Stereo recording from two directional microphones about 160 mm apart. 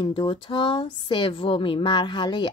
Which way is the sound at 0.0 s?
30° left (ahead or behind).